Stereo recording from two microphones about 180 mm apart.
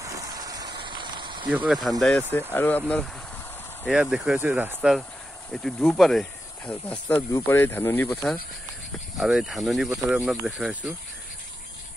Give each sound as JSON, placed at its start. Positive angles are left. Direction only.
{"t": 0.0, "sound": "vehicle", "side_deg": -20}
{"t": 1.7, "sound": "speech", "side_deg": 0}
{"t": 3.8, "sound": "speech", "side_deg": -5}